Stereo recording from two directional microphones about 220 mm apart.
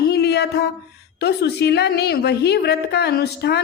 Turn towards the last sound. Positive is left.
turn(degrees=50)  # may be behind; listen again after turning